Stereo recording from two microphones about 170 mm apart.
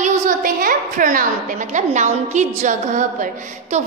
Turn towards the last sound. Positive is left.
turn(degrees=-40)  # may be behind; listen again after turning